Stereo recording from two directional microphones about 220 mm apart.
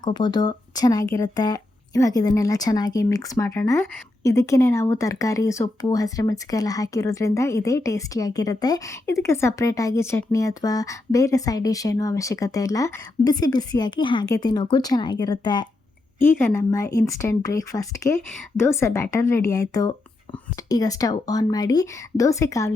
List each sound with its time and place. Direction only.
0.0 s speech: 20° left (ahead or behind)